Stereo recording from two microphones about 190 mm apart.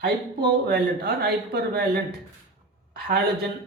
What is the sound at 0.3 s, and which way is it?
Speech, 55° right (ahead or behind).